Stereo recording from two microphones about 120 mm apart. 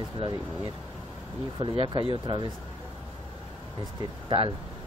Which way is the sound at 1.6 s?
45° right (ahead or behind).